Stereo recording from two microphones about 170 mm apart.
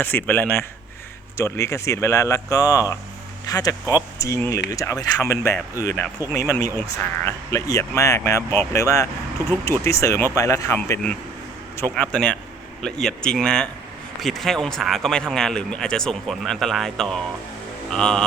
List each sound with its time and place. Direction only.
0.0 s speech: 10° left (ahead or behind)